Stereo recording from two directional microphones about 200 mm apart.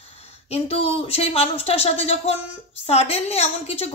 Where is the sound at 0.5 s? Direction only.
30° left (ahead or behind).